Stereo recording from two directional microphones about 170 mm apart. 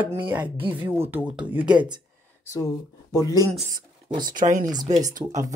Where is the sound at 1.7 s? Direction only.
25° right (ahead or behind).